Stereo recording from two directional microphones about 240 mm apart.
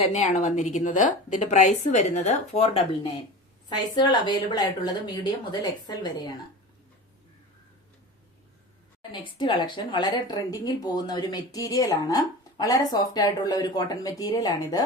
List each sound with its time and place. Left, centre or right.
0.0 s a woman's voice: left
9.0 s a woman's voice: centre